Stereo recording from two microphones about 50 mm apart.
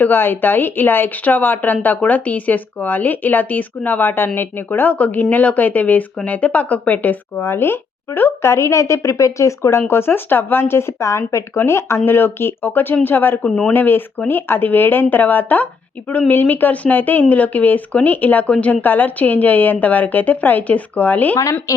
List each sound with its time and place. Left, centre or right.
0.0 s speech: left
4.9 s speech: left
7.5 s speech: left
9.8 s speech: left
18.4 s a woman's voice: left
18.7 s speech: left